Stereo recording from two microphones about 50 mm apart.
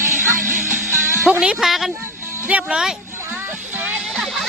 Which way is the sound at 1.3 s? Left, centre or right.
Right.